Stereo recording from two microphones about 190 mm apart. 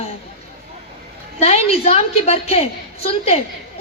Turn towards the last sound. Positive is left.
turn(degrees=35)  # may be behind; listen again after turning